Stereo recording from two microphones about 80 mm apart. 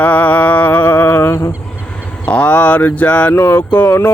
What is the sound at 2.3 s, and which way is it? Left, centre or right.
Speech, centre.